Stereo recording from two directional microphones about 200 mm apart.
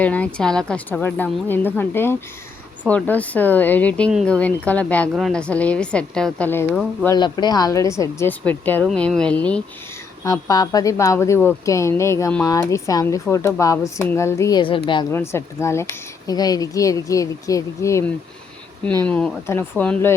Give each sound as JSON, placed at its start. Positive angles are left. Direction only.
{"t": 0.0, "sound": "a woman's voice", "side_deg": 5}
{"t": 7.2, "sound": "speech", "side_deg": 20}
{"t": 10.2, "sound": "speech", "side_deg": 20}